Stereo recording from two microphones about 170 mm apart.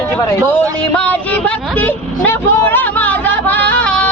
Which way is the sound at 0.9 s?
10° left (ahead or behind).